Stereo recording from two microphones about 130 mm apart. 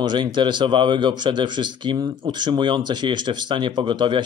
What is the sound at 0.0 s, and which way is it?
A man's voice, 35° right (ahead or behind).